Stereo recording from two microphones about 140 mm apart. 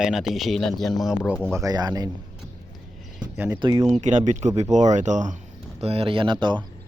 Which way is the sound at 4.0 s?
60° right (ahead or behind).